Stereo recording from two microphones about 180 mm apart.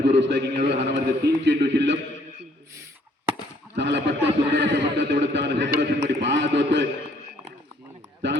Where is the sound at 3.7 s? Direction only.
80° right.